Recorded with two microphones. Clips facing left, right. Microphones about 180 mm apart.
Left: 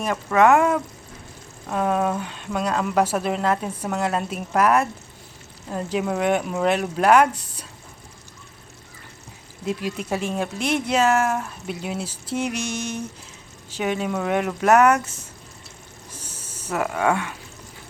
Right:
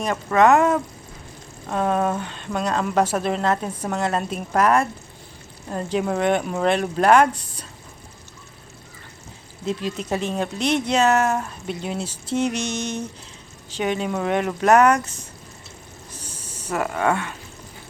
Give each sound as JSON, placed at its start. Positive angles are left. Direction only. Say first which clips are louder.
{"t": 0.0, "sound": "speech", "louder": "even", "side_deg": 5}
{"t": 9.6, "sound": "speech", "louder": "right 1 dB", "side_deg": 10}
{"t": 16.7, "sound": "speech", "louder": "even", "side_deg": 5}